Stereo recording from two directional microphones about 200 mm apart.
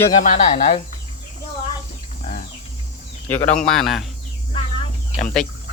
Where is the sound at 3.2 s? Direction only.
5° left (ahead or behind).